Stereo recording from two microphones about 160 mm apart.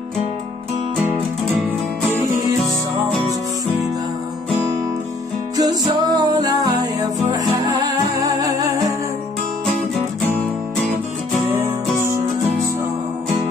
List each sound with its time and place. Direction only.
3.1 s music: 5° left (ahead or behind)
5.6 s music: 25° right (ahead or behind)
11.5 s music: 15° right (ahead or behind)